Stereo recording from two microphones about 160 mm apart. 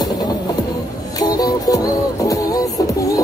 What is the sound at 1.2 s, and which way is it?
Music, 20° left (ahead or behind).